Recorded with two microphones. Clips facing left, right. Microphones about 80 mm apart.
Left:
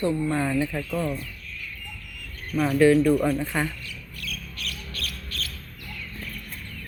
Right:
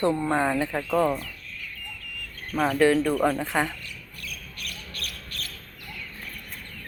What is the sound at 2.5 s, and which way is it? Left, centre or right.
Speech, right.